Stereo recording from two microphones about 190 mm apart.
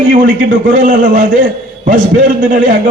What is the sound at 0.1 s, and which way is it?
A man's voice, 45° right (ahead or behind).